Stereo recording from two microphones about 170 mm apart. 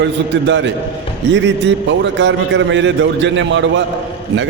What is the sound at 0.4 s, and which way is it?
A man's voice, 90° right.